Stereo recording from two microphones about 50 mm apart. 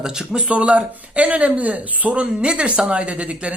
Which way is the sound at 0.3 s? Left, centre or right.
Right.